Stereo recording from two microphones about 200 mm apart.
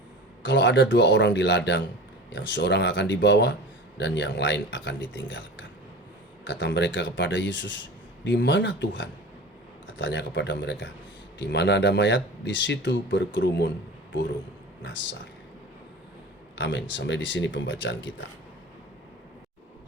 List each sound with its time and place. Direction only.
0.4 s speech: 65° left (ahead or behind)
14.8 s speech: 65° left (ahead or behind)
16.6 s speech: 65° left (ahead or behind)